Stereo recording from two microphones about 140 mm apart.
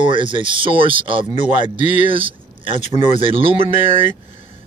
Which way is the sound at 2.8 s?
55° left (ahead or behind).